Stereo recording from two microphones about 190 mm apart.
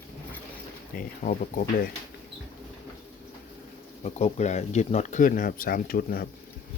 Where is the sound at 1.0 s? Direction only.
45° left (ahead or behind).